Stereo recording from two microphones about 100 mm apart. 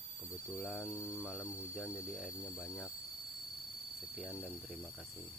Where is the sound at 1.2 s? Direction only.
5° right (ahead or behind).